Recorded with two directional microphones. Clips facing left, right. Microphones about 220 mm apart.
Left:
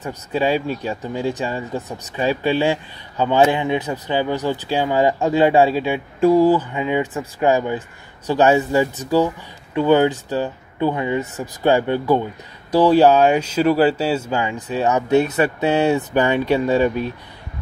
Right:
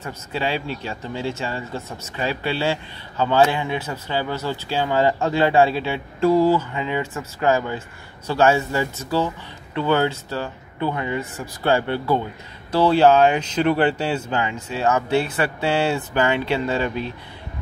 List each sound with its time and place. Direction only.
0.0 s speech: 15° left (ahead or behind)